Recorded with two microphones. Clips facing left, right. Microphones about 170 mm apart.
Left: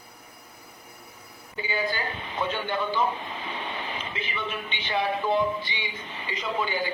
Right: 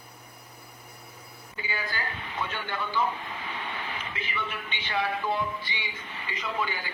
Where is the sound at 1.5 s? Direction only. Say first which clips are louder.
Left 6 dB; 25° left (ahead or behind).